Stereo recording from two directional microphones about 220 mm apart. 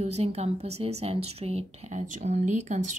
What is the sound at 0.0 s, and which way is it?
A woman's voice, 30° right (ahead or behind).